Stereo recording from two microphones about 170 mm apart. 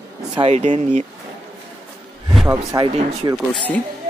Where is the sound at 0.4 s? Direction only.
40° right (ahead or behind).